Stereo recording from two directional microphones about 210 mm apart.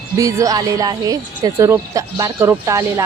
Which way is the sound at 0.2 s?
15° right (ahead or behind).